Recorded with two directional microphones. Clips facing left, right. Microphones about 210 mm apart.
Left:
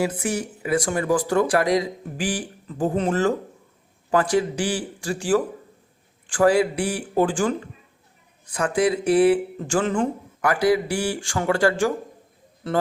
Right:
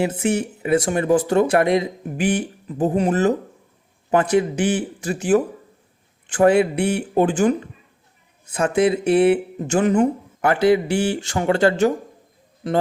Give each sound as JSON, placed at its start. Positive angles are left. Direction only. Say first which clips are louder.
{"t": 0.0, "sound": "a man's voice", "louder": "right 4 dB", "side_deg": -25}